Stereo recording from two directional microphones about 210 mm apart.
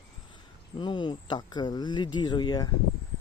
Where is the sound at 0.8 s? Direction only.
20° left (ahead or behind).